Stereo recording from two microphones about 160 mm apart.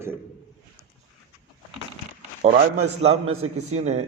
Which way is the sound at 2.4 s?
45° right (ahead or behind).